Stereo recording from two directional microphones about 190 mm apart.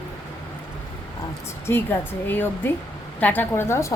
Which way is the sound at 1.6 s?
10° left (ahead or behind).